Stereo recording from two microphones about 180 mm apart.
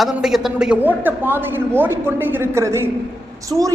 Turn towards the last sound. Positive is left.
turn(degrees=-20)  # may be behind; listen again after turning